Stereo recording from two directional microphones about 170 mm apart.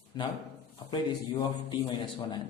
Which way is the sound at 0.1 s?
25° left (ahead or behind).